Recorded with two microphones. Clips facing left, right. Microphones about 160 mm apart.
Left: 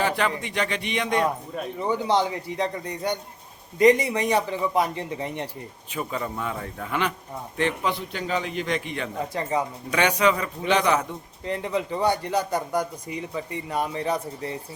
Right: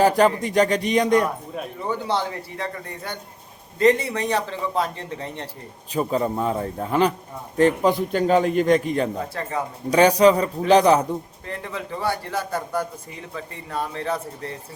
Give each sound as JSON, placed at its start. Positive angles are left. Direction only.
{"t": 0.0, "sound": "speech", "side_deg": -40}
{"t": 1.5, "sound": "speech", "side_deg": 0}
{"t": 1.9, "sound": "speech", "side_deg": 15}
{"t": 5.9, "sound": "a man's voice", "side_deg": -35}
{"t": 9.3, "sound": "speech", "side_deg": 15}
{"t": 9.9, "sound": "speech", "side_deg": -35}
{"t": 11.4, "sound": "speech", "side_deg": 20}